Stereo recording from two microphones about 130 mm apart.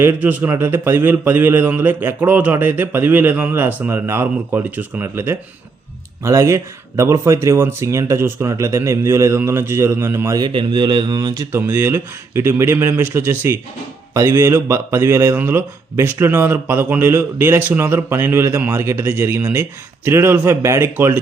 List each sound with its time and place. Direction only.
0.0 s speech: 15° right (ahead or behind)
10.4 s speech: 40° right (ahead or behind)
11.5 s speech: 20° right (ahead or behind)